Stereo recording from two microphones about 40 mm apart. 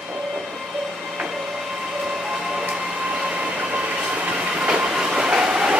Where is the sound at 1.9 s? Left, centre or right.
Centre.